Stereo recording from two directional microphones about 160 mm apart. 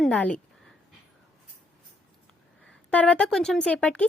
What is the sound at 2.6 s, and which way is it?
Speech, 10° left (ahead or behind).